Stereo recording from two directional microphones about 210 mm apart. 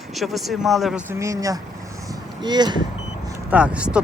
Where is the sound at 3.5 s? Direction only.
5° right (ahead or behind).